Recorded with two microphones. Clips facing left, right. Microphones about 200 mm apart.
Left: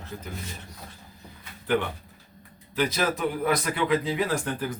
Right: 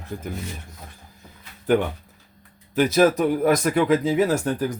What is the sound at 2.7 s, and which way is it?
Speech, 45° right (ahead or behind).